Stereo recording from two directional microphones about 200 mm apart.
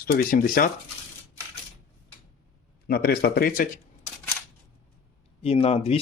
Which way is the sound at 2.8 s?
50° left (ahead or behind).